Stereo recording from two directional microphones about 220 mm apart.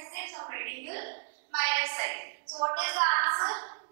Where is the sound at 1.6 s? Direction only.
10° right (ahead or behind).